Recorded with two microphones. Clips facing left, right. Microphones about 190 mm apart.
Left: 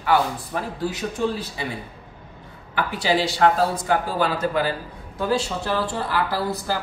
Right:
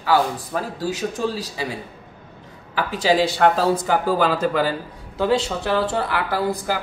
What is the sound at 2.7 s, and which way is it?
Speech, 45° right (ahead or behind).